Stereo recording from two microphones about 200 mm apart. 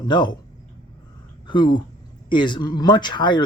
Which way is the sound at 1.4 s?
20° left (ahead or behind).